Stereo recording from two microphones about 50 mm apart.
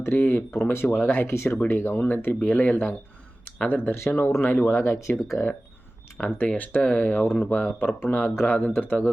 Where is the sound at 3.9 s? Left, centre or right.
Left.